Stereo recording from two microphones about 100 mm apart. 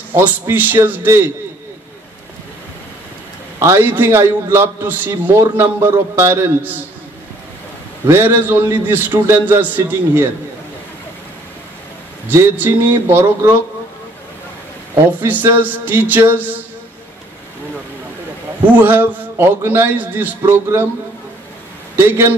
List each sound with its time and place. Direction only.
0.1 s a man's voice: 20° right (ahead or behind)
3.5 s a man's voice: 25° right (ahead or behind)
8.1 s a man's voice: 20° right (ahead or behind)
12.3 s a man's voice: 25° right (ahead or behind)
15.1 s a man's voice: 20° right (ahead or behind)
18.8 s a man's voice: 20° right (ahead or behind)
21.9 s a man's voice: 25° right (ahead or behind)